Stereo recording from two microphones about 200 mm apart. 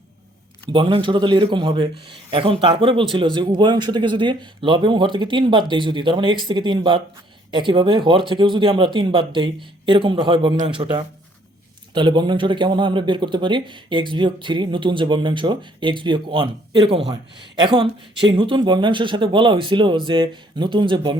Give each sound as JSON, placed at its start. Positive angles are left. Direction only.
{"t": 0.7, "sound": "speech", "side_deg": -25}